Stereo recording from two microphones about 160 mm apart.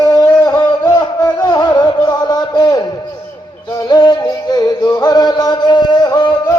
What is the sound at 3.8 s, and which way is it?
Music, 25° left (ahead or behind).